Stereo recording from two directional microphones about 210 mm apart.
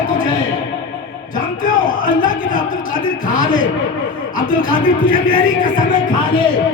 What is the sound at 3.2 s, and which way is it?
A man's voice, 40° left (ahead or behind).